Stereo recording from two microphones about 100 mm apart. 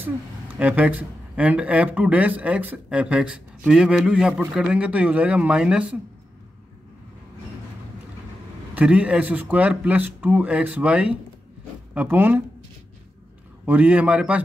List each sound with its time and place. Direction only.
0.6 s speech: 15° right (ahead or behind)
8.7 s speech: 15° right (ahead or behind)
13.7 s speech: 15° right (ahead or behind)